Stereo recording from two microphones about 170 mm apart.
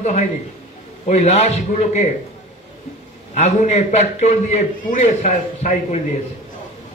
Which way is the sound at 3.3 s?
40° left (ahead or behind).